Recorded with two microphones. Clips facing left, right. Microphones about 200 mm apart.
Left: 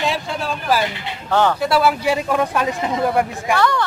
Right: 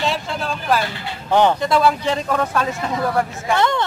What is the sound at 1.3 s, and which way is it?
Speech, 20° right (ahead or behind).